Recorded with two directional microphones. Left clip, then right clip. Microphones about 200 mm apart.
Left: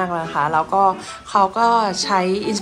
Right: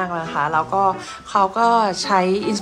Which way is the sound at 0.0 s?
10° right (ahead or behind).